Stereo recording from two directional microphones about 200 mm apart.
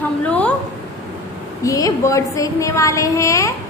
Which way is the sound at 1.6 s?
15° left (ahead or behind).